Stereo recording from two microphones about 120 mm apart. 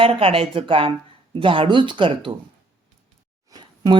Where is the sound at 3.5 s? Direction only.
35° right (ahead or behind).